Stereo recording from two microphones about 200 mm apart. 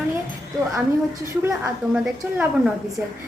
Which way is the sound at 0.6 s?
15° right (ahead or behind).